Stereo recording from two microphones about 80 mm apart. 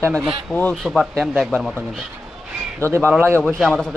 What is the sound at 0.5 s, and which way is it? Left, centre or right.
Speech, centre.